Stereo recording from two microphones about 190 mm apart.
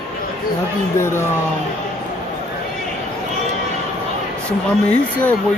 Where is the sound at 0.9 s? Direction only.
15° left (ahead or behind).